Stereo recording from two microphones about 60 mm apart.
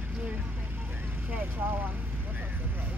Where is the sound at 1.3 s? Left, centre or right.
Right.